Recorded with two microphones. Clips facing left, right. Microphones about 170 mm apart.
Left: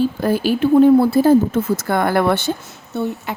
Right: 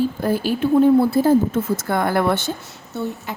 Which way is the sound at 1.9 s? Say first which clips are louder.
Left 2 dB; 80° left.